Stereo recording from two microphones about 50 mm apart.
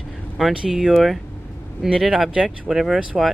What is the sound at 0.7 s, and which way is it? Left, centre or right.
Speech, centre.